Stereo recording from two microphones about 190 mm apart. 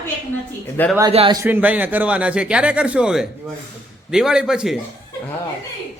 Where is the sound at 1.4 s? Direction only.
10° right (ahead or behind).